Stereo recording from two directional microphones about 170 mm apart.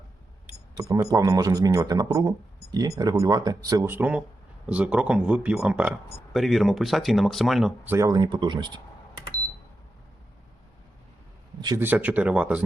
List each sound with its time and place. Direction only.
0.9 s speech: 20° right (ahead or behind); by 7.7 s centre (ahead or behind)
7.9 s speech: 20° right (ahead or behind)
11.8 s speech: 10° right (ahead or behind)